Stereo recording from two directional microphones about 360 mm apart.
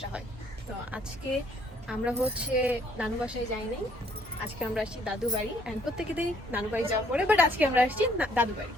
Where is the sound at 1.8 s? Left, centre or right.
Centre.